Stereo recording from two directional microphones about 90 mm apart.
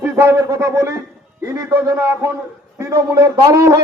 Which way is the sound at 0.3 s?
35° right (ahead or behind).